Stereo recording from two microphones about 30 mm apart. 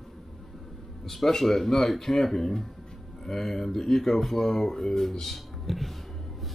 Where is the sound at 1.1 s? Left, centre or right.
Centre.